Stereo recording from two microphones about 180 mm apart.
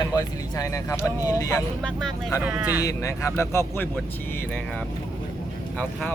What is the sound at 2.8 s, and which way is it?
Speech, 15° left (ahead or behind).